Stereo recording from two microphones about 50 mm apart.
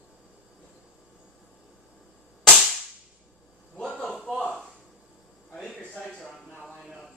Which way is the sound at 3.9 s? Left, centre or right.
Centre.